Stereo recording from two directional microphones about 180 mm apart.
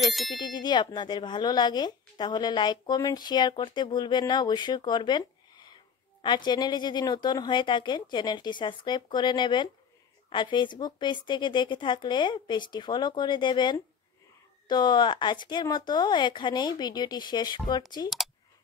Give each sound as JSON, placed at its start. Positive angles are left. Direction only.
{"t": 0.0, "sound": "speech", "side_deg": 0}
{"t": 0.4, "sound": "speech", "side_deg": 25}